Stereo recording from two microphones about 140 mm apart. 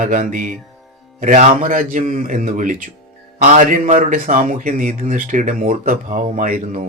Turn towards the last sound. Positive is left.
turn(degrees=-70)  # may be behind; listen again after turning